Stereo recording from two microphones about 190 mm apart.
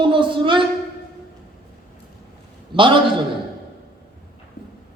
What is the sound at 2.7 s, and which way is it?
Speech, 25° right (ahead or behind).